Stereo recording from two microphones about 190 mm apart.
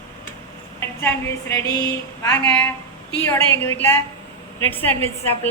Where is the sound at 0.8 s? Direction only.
10° left (ahead or behind).